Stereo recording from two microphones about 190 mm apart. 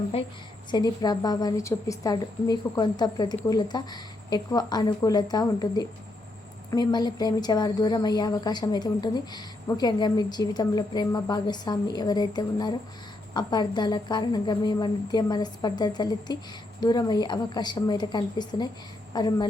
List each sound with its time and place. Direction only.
0.7 s a woman's voice: 20° left (ahead or behind)